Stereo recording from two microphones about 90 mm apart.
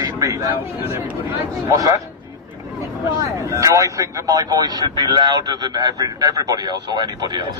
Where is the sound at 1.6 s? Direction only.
40° right (ahead or behind).